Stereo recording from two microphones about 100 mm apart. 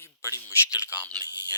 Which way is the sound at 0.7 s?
15° right (ahead or behind).